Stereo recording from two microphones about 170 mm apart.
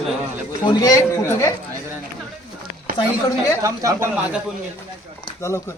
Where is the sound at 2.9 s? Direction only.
55° right (ahead or behind).